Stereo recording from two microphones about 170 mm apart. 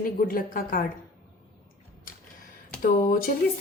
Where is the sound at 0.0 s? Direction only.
55° left (ahead or behind).